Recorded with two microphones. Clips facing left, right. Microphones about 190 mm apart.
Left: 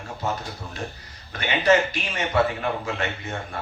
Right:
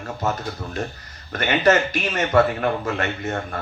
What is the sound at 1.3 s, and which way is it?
Speech, 45° right (ahead or behind).